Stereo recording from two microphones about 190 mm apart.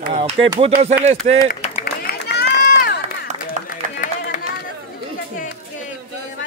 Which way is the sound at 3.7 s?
45° left (ahead or behind).